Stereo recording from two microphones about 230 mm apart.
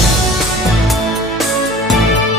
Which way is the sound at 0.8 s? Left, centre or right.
Centre.